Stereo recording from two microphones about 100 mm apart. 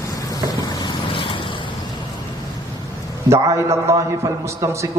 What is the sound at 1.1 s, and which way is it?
Vehicle, 60° left (ahead or behind).